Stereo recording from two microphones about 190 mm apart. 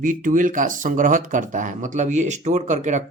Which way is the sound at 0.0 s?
45° right (ahead or behind).